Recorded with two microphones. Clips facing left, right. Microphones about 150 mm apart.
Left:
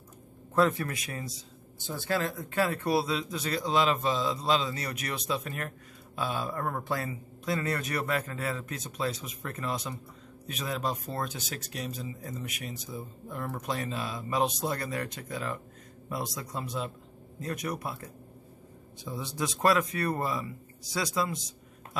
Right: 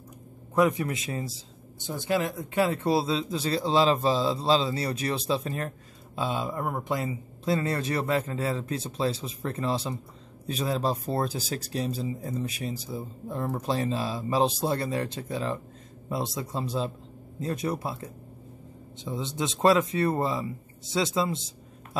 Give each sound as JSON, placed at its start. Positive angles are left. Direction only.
{"t": 0.6, "sound": "speech", "side_deg": -15}